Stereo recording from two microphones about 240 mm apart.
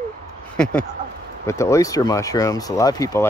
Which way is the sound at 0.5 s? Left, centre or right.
Centre.